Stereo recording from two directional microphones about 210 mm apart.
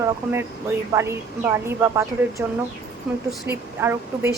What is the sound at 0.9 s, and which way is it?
Speech, 15° right (ahead or behind).